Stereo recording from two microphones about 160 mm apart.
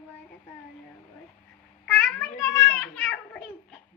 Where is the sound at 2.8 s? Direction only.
5° left (ahead or behind).